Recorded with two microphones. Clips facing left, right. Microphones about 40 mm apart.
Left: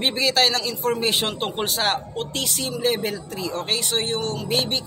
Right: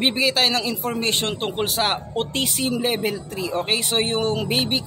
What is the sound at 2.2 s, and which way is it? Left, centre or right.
Speech, right.